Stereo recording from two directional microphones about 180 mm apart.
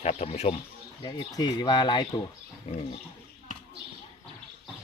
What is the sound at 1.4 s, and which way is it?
Speech, 25° left (ahead or behind).